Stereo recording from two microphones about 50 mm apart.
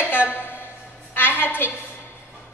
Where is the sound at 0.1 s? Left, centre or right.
Left.